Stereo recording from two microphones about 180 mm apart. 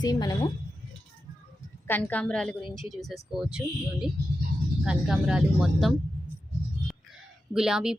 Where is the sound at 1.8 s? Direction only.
10° left (ahead or behind).